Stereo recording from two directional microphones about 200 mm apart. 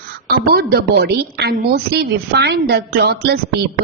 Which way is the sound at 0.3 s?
50° right (ahead or behind).